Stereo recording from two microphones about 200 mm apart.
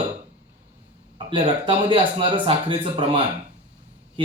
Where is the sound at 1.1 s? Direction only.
25° right (ahead or behind).